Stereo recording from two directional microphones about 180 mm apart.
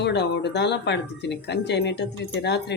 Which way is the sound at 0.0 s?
70° left (ahead or behind).